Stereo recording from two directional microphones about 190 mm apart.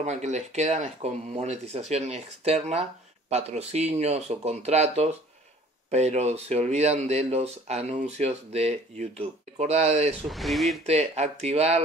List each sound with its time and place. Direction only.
0.0 s speech: 35° right (ahead or behind)
10.2 s speech: centre (ahead or behind)
10.9 s speech: 35° right (ahead or behind)